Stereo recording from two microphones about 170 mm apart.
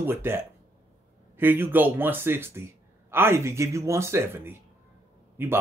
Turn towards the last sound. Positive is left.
turn(degrees=-10)  # may be behind; listen again after turning